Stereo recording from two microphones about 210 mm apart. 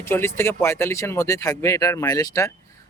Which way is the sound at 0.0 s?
10° left (ahead or behind).